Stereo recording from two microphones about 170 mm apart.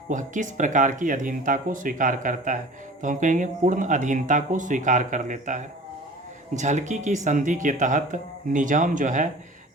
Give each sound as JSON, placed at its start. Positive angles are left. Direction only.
{"t": 0.1, "sound": "speech", "side_deg": -50}